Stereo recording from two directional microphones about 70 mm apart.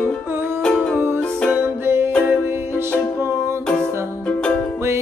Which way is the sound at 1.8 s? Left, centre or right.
Right.